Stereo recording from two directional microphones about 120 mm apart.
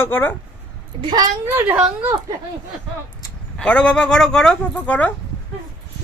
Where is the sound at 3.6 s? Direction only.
10° left (ahead or behind).